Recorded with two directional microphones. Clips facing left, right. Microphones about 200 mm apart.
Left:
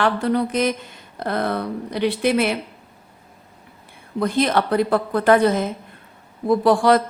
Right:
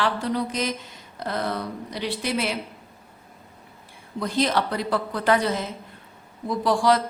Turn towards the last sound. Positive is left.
turn(degrees=55)  # may be behind; listen again after turning